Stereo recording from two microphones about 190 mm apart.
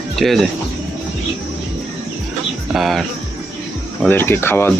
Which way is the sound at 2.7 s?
Centre (ahead or behind).